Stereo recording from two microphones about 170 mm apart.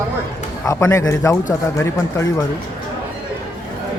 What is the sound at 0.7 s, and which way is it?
A man's voice, 15° left (ahead or behind).